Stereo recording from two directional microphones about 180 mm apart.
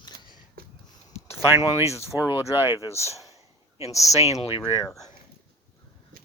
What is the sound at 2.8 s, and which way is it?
Speech, 15° left (ahead or behind).